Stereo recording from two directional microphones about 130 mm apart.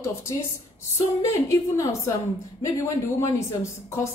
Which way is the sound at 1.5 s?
25° left (ahead or behind).